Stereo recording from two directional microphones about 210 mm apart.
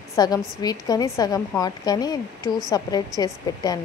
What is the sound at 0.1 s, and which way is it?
A woman's voice, 15° left (ahead or behind).